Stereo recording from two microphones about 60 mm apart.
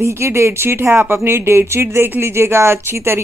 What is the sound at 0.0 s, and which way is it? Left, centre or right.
Speech, right.